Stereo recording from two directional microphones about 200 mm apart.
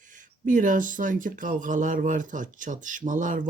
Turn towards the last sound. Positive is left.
turn(degrees=-40)  # may be behind; listen again after turning